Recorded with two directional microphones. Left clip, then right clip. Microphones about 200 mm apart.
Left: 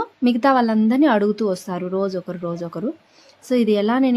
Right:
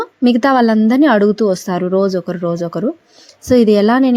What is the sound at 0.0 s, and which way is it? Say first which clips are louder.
Speech: right 5 dB; 25° right (ahead or behind).